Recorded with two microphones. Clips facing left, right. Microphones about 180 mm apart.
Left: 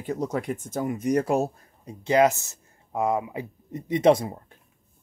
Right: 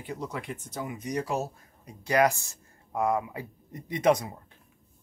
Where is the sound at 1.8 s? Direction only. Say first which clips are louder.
Left 4 dB; 25° left (ahead or behind).